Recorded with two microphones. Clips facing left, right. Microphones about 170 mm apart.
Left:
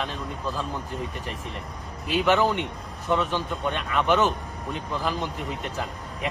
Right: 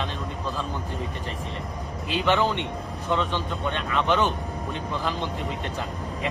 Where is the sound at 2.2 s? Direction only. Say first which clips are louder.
Left 1 dB; 5° left (ahead or behind).